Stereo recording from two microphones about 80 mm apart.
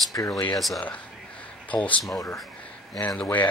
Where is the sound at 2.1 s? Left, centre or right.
Left.